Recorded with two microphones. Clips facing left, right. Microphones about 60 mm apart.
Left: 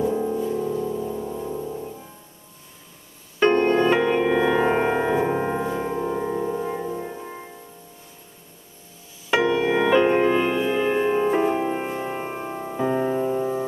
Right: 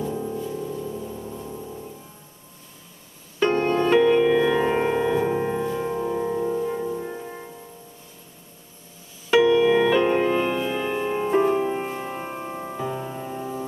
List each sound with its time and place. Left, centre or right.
0.0 s music: left
3.4 s music: left
3.7 s music: centre
9.3 s music: centre
12.7 s music: left